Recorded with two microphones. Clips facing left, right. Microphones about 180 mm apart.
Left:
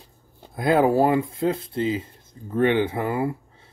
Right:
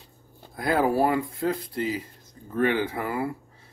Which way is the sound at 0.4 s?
20° left (ahead or behind).